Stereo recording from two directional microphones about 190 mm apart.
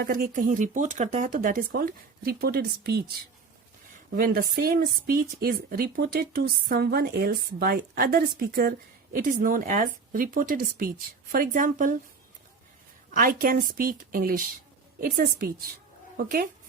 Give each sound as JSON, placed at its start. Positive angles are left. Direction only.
{"t": 0.0, "sound": "a woman's voice", "side_deg": -50}
{"t": 4.1, "sound": "a woman's voice", "side_deg": -50}
{"t": 13.1, "sound": "a woman's voice", "side_deg": -50}